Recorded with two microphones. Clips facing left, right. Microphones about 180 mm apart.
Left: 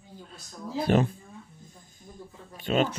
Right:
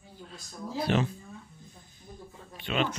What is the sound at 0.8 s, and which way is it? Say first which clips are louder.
Speech: left 4 dB; 50° left (ahead or behind).